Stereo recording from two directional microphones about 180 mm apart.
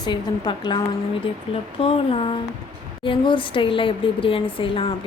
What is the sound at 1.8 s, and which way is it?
A woman's voice, 30° left (ahead or behind).